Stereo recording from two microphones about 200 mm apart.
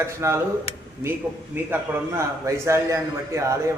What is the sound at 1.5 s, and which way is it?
A man's voice, 10° right (ahead or behind).